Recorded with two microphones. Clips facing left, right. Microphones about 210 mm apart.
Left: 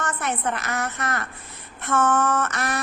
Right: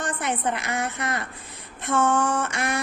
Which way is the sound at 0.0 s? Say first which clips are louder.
Even; 15° right (ahead or behind).